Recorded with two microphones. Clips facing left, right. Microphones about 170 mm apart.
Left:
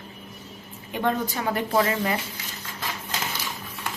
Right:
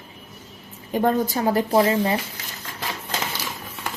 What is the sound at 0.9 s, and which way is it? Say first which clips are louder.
Speech: right 5 dB; 40° right (ahead or behind).